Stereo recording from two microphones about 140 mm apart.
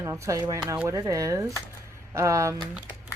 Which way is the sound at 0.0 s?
20° right (ahead or behind).